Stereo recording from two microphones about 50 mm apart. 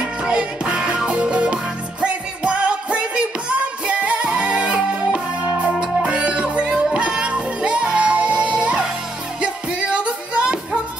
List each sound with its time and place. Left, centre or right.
0.0 s music: centre